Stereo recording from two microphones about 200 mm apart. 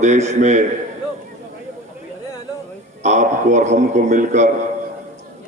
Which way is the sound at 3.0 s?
35° right (ahead or behind).